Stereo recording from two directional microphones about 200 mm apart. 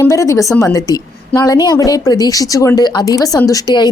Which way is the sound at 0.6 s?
15° left (ahead or behind).